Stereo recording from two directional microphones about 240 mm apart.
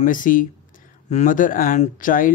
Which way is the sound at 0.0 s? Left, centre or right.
Left.